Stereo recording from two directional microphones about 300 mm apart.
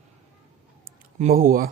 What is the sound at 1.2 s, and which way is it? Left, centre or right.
Speech, right.